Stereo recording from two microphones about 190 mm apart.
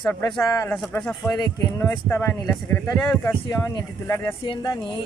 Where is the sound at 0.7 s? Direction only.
5° left (ahead or behind).